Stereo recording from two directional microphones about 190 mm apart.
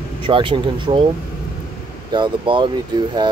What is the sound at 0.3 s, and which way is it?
Speech, 25° right (ahead or behind).